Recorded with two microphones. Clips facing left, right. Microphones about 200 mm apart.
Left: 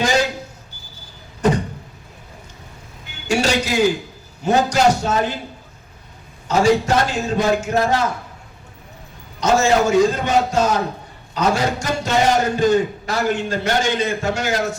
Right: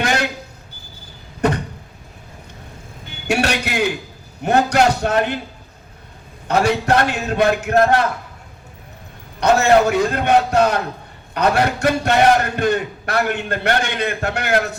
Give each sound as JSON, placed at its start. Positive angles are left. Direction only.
{"t": 0.0, "sound": "a sound", "side_deg": -60}
{"t": 3.2, "sound": "a man's voice", "side_deg": -60}
{"t": 6.5, "sound": "a man's voice", "side_deg": -60}
{"t": 9.4, "sound": "a man's voice", "side_deg": -60}